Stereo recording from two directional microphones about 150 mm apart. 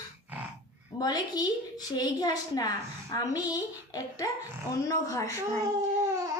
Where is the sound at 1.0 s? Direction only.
25° left (ahead or behind).